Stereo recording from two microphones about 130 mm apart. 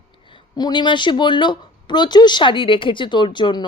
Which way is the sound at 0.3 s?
35° left (ahead or behind).